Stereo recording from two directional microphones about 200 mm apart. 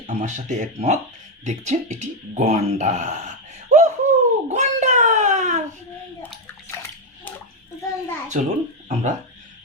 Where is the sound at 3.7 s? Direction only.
35° right (ahead or behind).